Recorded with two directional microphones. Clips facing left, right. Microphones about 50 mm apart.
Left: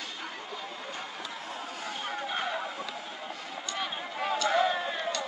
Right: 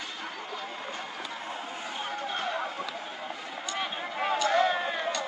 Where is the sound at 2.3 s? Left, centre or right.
Centre.